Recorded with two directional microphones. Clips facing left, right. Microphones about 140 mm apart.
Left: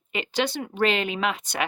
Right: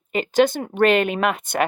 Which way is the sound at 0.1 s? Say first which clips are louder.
Right 9 dB; 45° right (ahead or behind).